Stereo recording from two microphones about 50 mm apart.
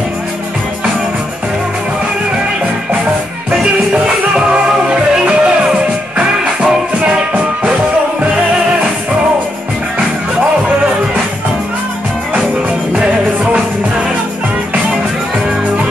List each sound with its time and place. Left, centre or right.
4.5 s music: centre
12.9 s music: right